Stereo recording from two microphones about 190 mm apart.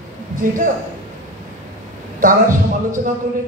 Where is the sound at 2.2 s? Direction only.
45° right (ahead or behind).